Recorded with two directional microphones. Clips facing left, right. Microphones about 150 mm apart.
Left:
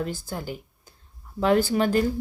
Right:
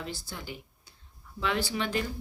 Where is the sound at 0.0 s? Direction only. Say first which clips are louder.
Left 9 dB; 50° left (ahead or behind).